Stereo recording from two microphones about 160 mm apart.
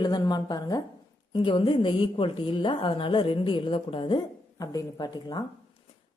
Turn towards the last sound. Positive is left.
turn(degrees=25)  # may be behind; listen again after turning